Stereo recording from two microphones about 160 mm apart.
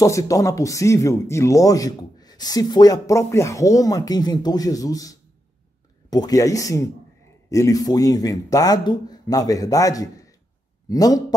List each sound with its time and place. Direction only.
0.0 s speech: 20° left (ahead or behind)